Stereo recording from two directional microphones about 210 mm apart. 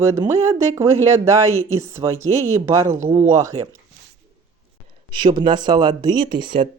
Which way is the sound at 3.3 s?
15° right (ahead or behind).